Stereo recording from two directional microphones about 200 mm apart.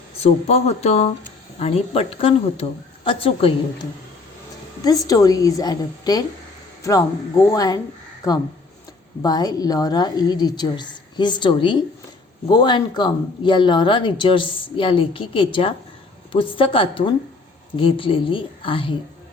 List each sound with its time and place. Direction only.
0.2 s speech: 30° left (ahead or behind)
4.8 s a woman's voice: 20° left (ahead or behind)